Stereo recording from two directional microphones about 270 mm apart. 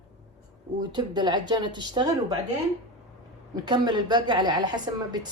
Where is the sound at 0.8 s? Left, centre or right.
Centre.